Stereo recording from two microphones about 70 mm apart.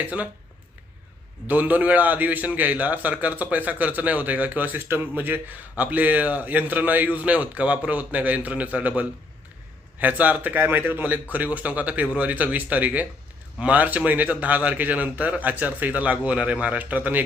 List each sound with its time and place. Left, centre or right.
0.0 s a man's voice: right
1.5 s a man's voice: right